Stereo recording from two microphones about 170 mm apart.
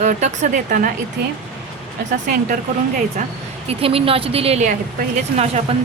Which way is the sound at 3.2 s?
50° right (ahead or behind).